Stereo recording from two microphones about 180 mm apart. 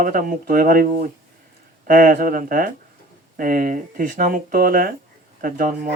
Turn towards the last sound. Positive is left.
turn(degrees=-50)  # may be behind; listen again after turning